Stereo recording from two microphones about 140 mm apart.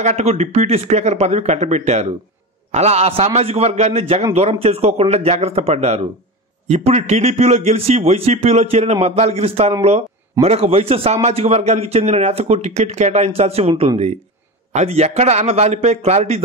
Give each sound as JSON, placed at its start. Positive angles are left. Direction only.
{"t": 0.0, "sound": "a man's voice", "side_deg": -50}